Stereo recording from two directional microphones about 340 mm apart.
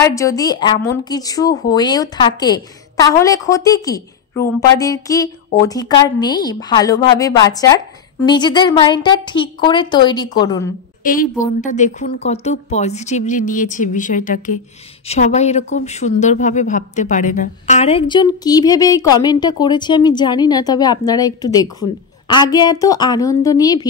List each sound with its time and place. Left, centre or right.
0.0 s speech: centre
11.1 s a woman's voice: left